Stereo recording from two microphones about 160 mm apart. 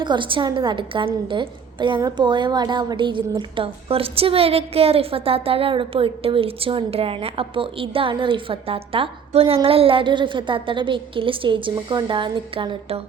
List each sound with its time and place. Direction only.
0.0 s a woman's voice: 30° right (ahead or behind)